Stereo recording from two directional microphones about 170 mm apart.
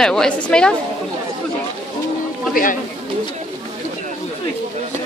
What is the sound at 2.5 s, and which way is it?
Speech, 50° left (ahead or behind).